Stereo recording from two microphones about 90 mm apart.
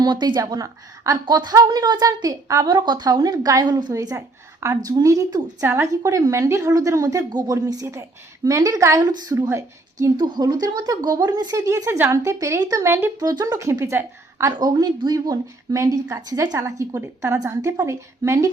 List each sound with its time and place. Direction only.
0.0 s a woman's voice: 55° right (ahead or behind)
0.3 s speech: 40° right (ahead or behind)
1.2 s a woman's voice: 55° right (ahead or behind)
2.6 s a woman's voice: 55° right (ahead or behind)
3.9 s a woman's voice: 35° right (ahead or behind)
5.6 s a woman's voice: 30° right (ahead or behind)
5.9 s a woman's voice: 40° right (ahead or behind)
10.2 s a woman's voice: 55° right (ahead or behind)
11.9 s speech: 30° right (ahead or behind)
12.8 s a woman's voice: 30° right (ahead or behind)
13.1 s speech: 40° right (ahead or behind)
14.6 s speech: 50° right (ahead or behind)